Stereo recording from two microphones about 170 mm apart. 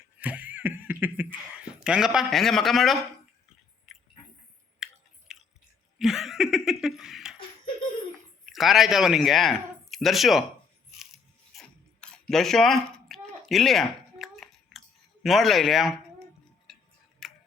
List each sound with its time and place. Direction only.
0.2 s a sound: 10° right (ahead or behind)
1.8 s a man's voice: 5° right (ahead or behind)
3.9 s a sound: centre (ahead or behind)
4.8 s chewing: 5° right (ahead or behind)
6.0 s laughter: centre (ahead or behind)
8.4 s speech: centre (ahead or behind)
11.5 s ratchet: 5° left (ahead or behind)
12.3 s a sound: centre (ahead or behind)
15.2 s a man's voice: centre (ahead or behind)
17.2 s tick-tock: centre (ahead or behind)